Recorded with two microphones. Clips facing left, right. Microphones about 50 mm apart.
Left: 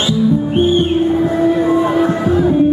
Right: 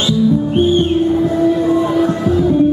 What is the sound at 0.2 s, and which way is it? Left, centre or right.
Music, centre.